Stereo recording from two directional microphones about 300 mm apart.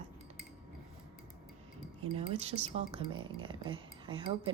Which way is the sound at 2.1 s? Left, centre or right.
Centre.